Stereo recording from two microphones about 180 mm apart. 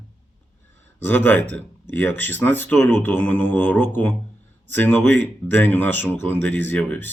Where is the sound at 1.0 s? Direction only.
10° left (ahead or behind).